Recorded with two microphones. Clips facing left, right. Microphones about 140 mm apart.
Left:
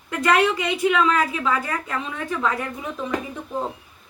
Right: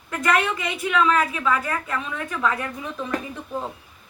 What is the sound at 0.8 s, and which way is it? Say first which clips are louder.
A woman's voice: even; 30° left (ahead or behind).